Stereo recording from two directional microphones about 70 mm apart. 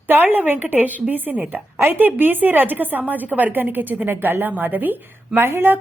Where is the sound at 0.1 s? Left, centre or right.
Right.